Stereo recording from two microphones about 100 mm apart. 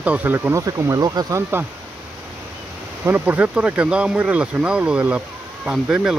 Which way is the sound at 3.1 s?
15° right (ahead or behind).